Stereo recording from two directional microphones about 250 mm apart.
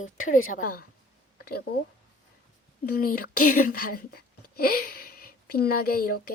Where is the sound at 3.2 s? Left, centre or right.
Left.